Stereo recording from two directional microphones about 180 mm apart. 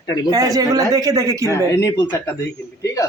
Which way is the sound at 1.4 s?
15° left (ahead or behind).